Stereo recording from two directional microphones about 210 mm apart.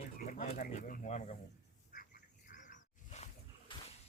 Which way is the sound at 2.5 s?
35° left (ahead or behind).